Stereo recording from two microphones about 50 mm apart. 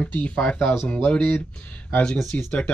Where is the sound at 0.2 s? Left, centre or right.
Left.